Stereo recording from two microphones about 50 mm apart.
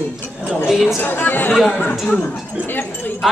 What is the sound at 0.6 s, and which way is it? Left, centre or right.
Speech, centre.